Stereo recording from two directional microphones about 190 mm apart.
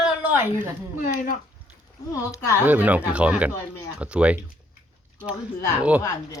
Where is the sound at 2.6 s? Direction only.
10° right (ahead or behind).